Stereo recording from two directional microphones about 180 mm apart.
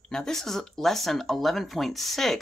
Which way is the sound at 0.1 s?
5° left (ahead or behind).